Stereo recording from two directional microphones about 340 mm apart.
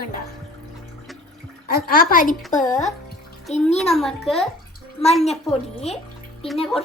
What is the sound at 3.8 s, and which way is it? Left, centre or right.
Speech, centre.